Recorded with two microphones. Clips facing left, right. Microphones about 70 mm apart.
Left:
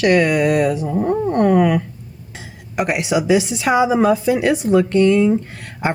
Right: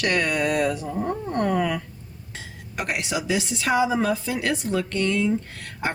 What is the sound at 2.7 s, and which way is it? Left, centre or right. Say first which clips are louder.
A woman's voice: left 9 dB; centre.